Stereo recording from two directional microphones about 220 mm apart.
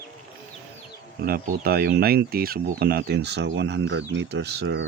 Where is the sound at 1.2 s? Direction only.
45° right (ahead or behind).